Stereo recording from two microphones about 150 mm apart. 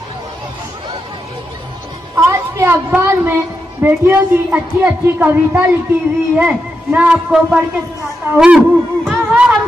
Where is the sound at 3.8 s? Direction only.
15° right (ahead or behind).